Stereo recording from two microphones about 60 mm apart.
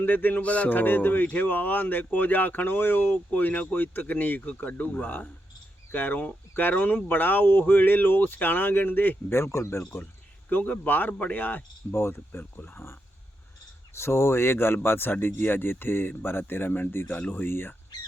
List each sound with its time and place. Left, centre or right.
0.0 s speech: left
9.4 s speech: left
10.5 s speech: left
11.9 s speech: left
12.3 s speech: left